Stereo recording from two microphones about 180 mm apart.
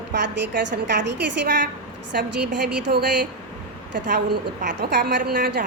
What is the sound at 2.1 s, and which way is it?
A woman's voice, 60° right (ahead or behind).